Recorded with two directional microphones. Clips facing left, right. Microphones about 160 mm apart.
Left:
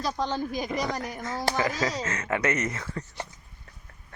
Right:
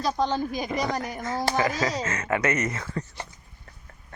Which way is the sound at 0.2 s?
5° left (ahead or behind).